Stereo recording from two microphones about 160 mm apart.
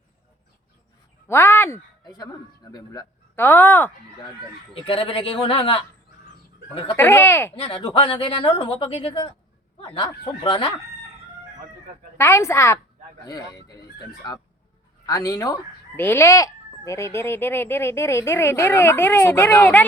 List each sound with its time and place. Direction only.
1.3 s speech: 15° left (ahead or behind)
3.3 s speech: 15° left (ahead or behind)
4.9 s a woman's voice: 35° left (ahead or behind)
6.9 s speech: 15° left (ahead or behind)
7.5 s a woman's voice: 35° left (ahead or behind)
12.1 s speech: 15° left (ahead or behind)